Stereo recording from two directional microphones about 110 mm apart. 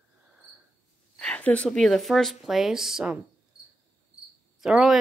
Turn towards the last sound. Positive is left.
turn(degrees=-5)  # may be behind; listen again after turning